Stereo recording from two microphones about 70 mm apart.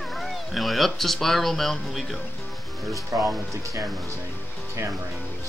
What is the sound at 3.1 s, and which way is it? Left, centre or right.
Speech, right.